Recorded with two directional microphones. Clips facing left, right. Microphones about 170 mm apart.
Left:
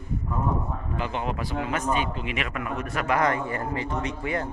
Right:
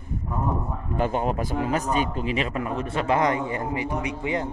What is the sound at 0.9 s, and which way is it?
A man's voice, 45° right (ahead or behind).